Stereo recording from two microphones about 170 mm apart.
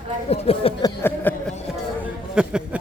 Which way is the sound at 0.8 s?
15° left (ahead or behind).